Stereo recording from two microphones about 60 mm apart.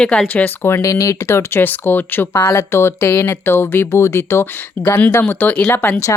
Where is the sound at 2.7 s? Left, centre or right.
Left.